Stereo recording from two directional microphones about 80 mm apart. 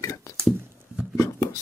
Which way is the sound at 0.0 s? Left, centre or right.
Left.